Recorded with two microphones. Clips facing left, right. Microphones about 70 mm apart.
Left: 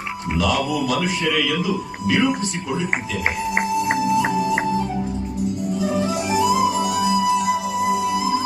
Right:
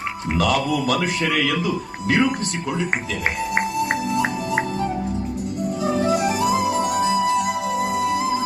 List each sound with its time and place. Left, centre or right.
0.3 s a man's voice: right
3.5 s music: centre
5.8 s music: right
7.4 s music: centre
7.9 s music: right